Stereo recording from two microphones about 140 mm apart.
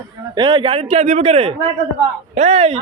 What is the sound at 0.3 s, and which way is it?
A man's voice, 35° right (ahead or behind).